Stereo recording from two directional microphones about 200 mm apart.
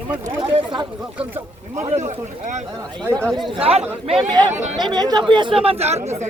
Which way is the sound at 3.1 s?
15° right (ahead or behind).